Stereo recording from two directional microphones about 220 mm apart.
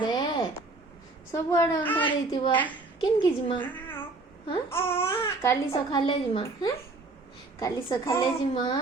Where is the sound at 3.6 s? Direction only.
10° left (ahead or behind).